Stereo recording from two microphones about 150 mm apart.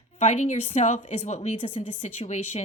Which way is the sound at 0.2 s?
50° left (ahead or behind).